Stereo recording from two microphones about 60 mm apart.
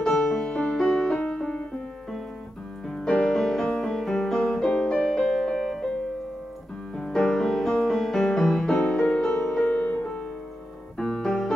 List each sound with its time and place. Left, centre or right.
0.0 s music: centre
2.9 s music: centre
7.0 s music: centre
9.8 s music: left
11.0 s music: centre